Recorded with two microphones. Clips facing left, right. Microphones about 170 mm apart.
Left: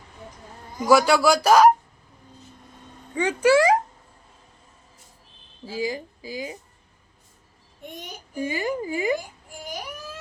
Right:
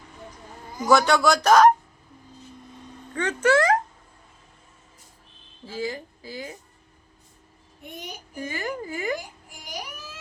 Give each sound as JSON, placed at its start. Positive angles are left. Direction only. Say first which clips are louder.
{"t": 0.9, "sound": "speech", "louder": "left 2 dB", "side_deg": 5}
{"t": 3.2, "sound": "speech", "louder": "left 3 dB", "side_deg": 10}
{"t": 5.6, "sound": "speech", "louder": "left 3 dB", "side_deg": 10}
{"t": 8.4, "sound": "speech", "louder": "left 5 dB", "side_deg": 15}